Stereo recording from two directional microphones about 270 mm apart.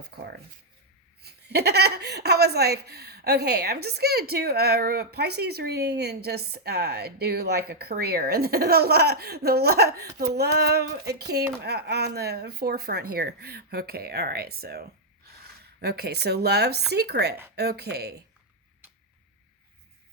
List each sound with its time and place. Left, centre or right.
0.0 s speech: right